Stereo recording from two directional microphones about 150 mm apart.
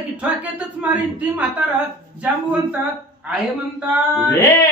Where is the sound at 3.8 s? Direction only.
5° right (ahead or behind).